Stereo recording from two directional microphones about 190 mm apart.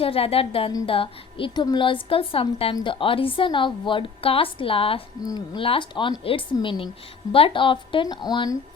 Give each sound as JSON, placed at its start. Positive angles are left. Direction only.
{"t": 0.0, "sound": "a woman's voice", "side_deg": 30}